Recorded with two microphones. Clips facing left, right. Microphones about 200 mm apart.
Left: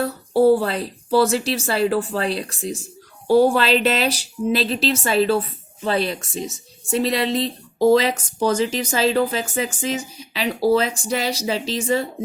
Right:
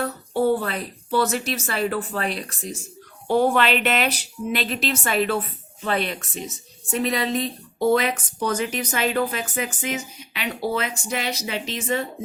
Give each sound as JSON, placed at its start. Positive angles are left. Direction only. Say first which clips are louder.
{"t": 0.0, "sound": "speech", "louder": "left 6 dB", "side_deg": 35}